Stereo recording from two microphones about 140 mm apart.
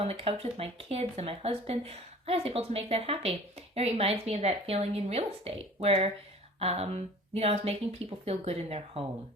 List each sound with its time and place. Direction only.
0.0 s speech: 45° right (ahead or behind)